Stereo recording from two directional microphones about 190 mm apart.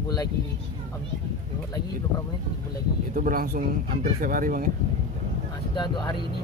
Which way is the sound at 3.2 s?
45° right (ahead or behind).